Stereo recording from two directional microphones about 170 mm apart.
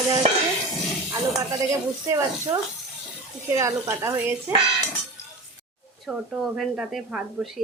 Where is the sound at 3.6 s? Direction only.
15° right (ahead or behind).